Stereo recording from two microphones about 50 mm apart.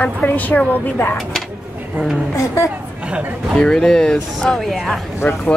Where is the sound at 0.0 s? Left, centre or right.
Left.